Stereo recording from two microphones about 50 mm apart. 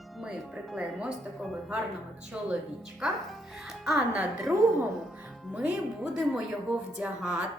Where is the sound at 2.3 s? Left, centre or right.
Right.